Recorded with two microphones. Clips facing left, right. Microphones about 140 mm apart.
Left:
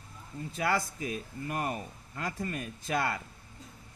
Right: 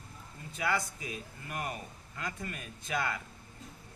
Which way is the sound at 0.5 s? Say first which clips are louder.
Left 2 dB; 50° left (ahead or behind).